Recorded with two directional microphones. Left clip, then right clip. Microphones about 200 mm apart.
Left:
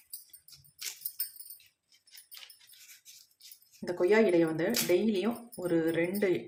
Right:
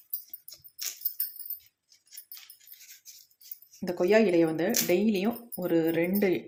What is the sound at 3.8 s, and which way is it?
Speech, 30° right (ahead or behind).